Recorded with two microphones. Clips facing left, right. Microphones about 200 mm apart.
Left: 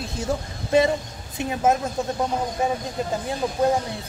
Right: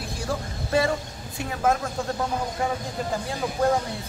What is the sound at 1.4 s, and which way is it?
Speech, 20° left (ahead or behind).